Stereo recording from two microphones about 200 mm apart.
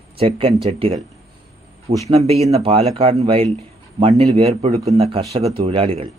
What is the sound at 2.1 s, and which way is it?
Speech, 30° right (ahead or behind).